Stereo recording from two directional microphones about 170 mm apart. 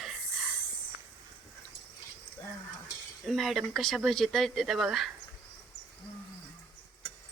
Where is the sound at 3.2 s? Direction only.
Centre (ahead or behind).